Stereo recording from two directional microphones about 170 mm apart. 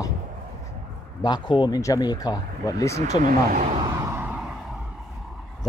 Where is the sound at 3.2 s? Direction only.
50° right (ahead or behind).